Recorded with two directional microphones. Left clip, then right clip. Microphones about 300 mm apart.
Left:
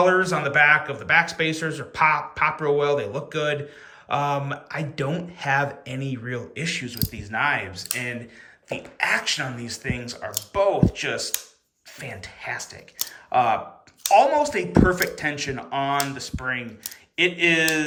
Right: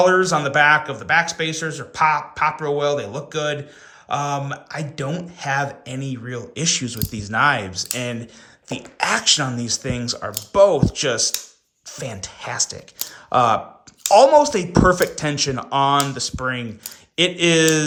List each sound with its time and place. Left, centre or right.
0.0 s a man's voice: centre